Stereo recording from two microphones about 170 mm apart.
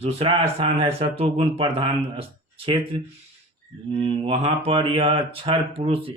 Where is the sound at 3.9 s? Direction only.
35° right (ahead or behind).